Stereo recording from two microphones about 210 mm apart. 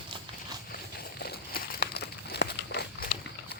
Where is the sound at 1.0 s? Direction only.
50° left (ahead or behind).